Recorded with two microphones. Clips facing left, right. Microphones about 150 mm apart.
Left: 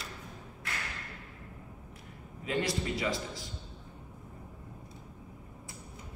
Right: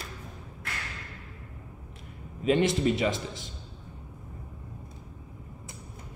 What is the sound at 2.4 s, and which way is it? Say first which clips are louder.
A man's voice: right 9 dB; 20° right (ahead or behind).